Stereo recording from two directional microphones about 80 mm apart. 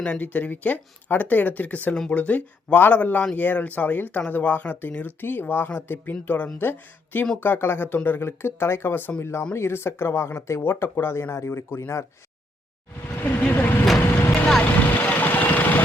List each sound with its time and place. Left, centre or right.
0.0 s speech: centre; by 12.0 s left
13.4 s speech: left
14.6 s vehicle: left